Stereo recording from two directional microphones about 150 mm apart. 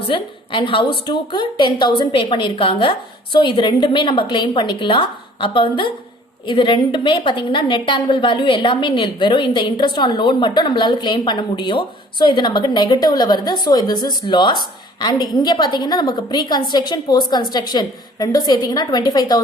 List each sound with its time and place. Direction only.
0.1 s a woman's voice: 35° left (ahead or behind)